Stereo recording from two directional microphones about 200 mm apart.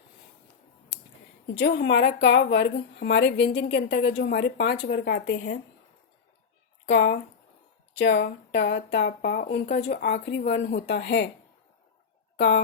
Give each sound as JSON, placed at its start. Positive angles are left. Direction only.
{"t": 1.5, "sound": "a woman's voice", "side_deg": 55}
{"t": 6.8, "sound": "a woman's voice", "side_deg": 60}